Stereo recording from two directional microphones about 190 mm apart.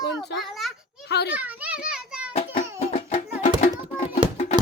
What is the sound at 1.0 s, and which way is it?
Children playing, 60° left (ahead or behind).